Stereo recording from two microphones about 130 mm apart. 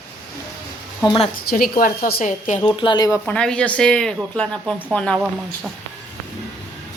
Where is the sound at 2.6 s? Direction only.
35° left (ahead or behind).